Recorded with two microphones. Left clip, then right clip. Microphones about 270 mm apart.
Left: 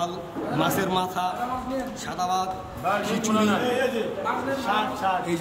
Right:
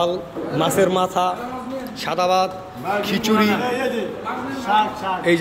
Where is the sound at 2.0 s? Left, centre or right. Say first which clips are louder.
Right 9 dB; centre.